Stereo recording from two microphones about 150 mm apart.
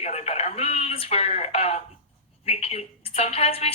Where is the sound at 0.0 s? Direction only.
45° left (ahead or behind).